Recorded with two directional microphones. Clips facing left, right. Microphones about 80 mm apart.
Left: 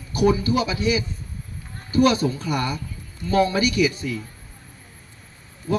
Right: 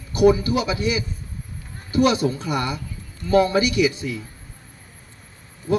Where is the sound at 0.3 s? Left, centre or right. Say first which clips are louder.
Right 3 dB; centre.